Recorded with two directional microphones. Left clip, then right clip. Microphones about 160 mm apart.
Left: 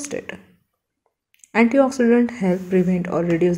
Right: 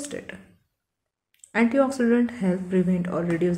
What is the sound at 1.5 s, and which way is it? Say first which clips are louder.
Speech: left 5 dB; 20° left (ahead or behind).